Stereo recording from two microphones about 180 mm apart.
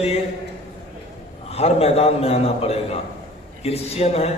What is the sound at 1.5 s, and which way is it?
A man's voice, 35° left (ahead or behind).